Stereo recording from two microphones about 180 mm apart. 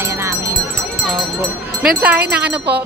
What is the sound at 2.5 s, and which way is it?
Speech, 65° right (ahead or behind).